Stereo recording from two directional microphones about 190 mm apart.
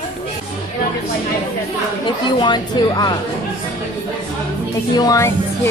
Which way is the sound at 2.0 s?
25° left (ahead or behind).